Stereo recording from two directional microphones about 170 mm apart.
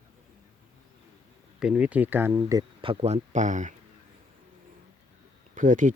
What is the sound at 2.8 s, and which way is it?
Speech, 35° right (ahead or behind).